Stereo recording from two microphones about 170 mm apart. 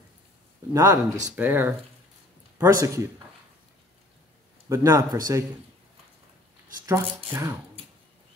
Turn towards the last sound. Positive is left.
turn(degrees=-15)  # may be behind; listen again after turning